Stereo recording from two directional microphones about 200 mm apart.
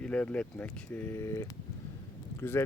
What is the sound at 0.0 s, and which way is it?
Speech, 5° left (ahead or behind).